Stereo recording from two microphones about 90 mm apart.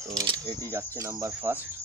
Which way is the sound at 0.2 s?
55° right (ahead or behind).